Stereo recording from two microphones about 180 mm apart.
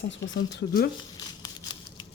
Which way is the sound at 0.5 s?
60° left (ahead or behind).